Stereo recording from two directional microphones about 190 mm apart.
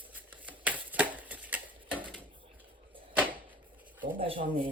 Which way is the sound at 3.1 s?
10° right (ahead or behind).